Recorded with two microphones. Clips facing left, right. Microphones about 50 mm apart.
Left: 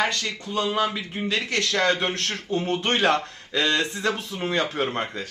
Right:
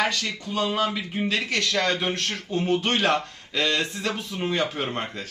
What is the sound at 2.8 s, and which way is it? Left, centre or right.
Speech, left.